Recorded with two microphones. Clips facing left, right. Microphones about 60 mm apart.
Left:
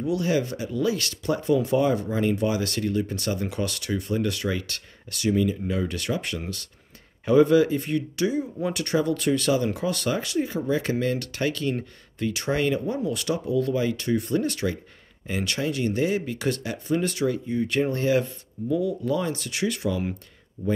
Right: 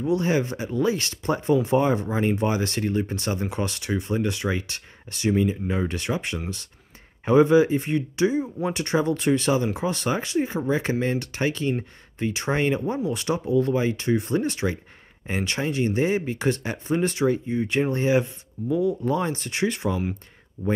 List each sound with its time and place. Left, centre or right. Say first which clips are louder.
0.0 s speech: right 2 dB; right